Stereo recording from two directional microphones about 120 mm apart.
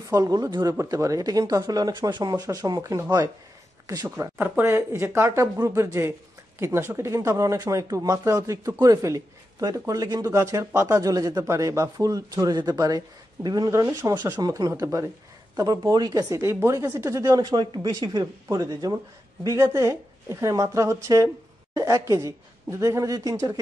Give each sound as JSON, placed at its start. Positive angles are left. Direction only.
{"t": 0.1, "sound": "speech", "side_deg": -30}
{"t": 4.4, "sound": "speech", "side_deg": -20}